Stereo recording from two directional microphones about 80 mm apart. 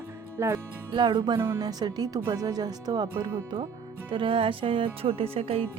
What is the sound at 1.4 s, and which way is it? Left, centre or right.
Speech, right.